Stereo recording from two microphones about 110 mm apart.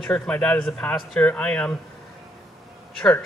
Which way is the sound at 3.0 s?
15° left (ahead or behind).